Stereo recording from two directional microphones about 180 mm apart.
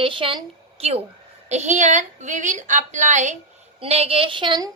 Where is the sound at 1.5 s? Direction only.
40° right (ahead or behind).